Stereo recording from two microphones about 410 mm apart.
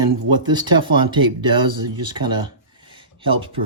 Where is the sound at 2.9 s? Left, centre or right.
Centre.